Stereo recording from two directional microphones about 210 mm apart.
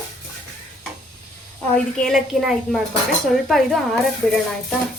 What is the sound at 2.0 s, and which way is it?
Speech, centre (ahead or behind).